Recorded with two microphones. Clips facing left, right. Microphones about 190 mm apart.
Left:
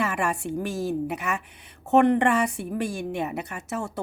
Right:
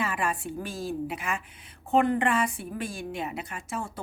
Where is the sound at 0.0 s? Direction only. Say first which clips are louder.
Left 3 dB; 75° left (ahead or behind).